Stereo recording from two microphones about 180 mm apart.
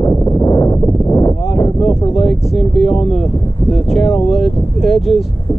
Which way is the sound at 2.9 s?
35° left (ahead or behind).